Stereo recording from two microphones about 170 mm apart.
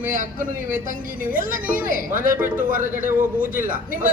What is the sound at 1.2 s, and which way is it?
Speech, 55° right (ahead or behind).